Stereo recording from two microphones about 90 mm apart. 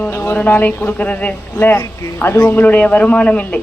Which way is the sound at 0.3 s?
20° left (ahead or behind).